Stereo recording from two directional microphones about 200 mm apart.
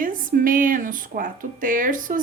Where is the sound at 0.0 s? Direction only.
45° right (ahead or behind).